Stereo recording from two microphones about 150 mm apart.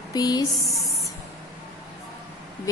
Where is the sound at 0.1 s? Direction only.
25° left (ahead or behind).